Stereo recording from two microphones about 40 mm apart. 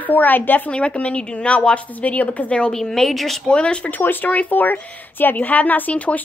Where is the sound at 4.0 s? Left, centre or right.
Left.